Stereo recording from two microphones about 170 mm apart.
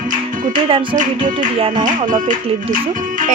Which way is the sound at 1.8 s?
50° right (ahead or behind).